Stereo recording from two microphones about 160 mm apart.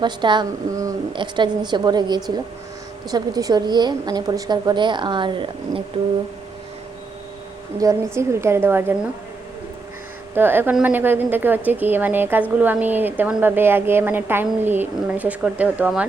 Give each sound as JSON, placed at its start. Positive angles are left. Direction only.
{"t": 0.0, "sound": "a woman's voice", "side_deg": -30}
{"t": 7.8, "sound": "a woman's voice", "side_deg": -20}
{"t": 10.3, "sound": "a woman's voice", "side_deg": -15}